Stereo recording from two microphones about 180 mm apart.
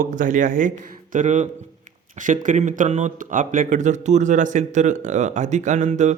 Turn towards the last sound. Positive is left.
turn(degrees=-40)  # may be behind; listen again after turning